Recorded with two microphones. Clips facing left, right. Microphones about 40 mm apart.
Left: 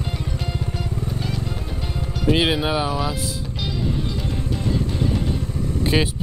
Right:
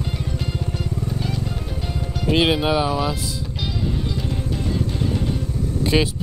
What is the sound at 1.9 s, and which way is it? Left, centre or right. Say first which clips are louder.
Speech: even; centre.